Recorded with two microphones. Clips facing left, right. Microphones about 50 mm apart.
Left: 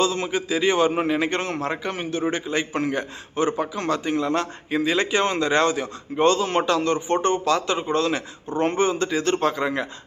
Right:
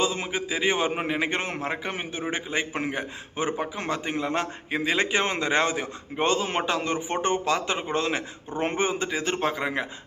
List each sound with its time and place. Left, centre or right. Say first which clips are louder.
0.0 s a man's voice: left 4 dB; centre